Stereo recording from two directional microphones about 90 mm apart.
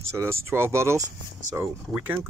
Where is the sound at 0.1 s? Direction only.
30° right (ahead or behind).